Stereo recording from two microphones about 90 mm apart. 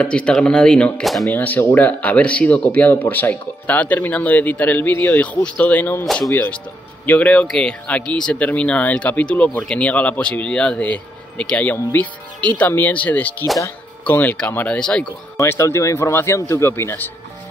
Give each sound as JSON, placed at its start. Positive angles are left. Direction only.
{"t": 0.0, "sound": "speech", "side_deg": 10}
{"t": 6.0, "sound": "speech", "side_deg": 0}
{"t": 6.3, "sound": "speech", "side_deg": 20}
{"t": 15.3, "sound": "speech", "side_deg": 30}